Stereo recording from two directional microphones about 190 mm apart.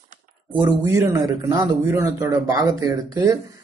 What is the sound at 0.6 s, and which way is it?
A man's voice, 20° right (ahead or behind).